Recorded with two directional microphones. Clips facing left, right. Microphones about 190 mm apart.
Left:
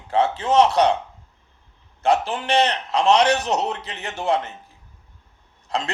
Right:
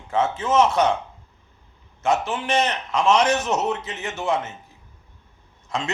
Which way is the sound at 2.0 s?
35° left (ahead or behind).